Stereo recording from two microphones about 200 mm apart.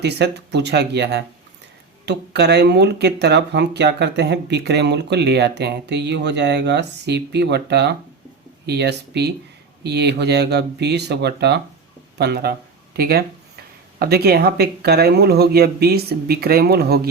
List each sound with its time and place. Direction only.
0.0 s speech: 55° right (ahead or behind)